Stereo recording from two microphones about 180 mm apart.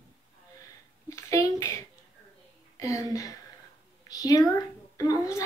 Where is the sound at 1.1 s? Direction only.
15° left (ahead or behind).